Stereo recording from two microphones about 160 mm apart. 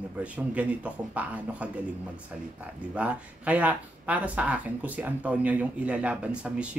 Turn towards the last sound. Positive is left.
turn(degrees=-5)  # may be behind; listen again after turning